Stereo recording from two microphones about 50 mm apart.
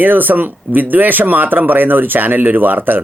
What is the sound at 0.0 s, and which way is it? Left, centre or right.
Speech, right.